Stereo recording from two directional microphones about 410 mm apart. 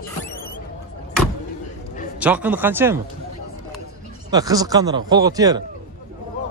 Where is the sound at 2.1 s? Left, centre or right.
Centre.